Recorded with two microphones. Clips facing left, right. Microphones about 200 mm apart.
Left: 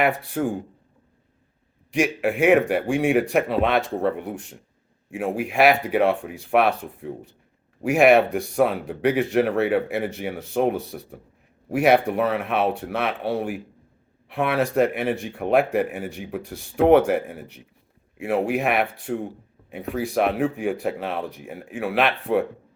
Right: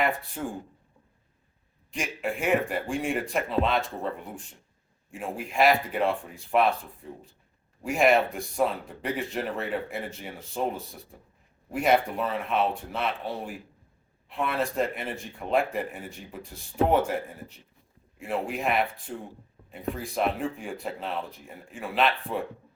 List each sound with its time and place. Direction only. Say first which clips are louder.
0.0 s speech: left 6 dB; 70° left (ahead or behind)
1.9 s speech: left 9 dB; 70° left (ahead or behind)